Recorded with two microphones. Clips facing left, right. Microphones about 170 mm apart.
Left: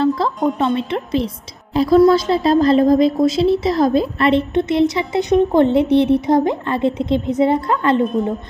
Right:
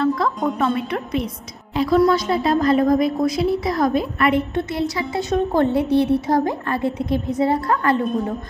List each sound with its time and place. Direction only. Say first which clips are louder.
0.0 s a woman's voice: left 3 dB; 30° left (ahead or behind)